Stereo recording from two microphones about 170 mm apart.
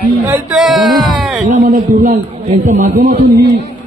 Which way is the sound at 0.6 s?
Centre (ahead or behind).